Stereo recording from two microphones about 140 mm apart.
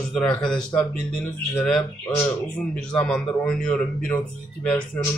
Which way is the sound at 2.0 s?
15° left (ahead or behind).